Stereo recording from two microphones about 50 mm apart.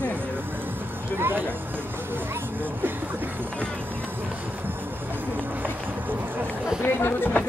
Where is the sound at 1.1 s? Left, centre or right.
Right.